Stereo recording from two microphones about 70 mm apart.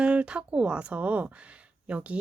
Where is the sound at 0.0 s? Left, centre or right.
Centre.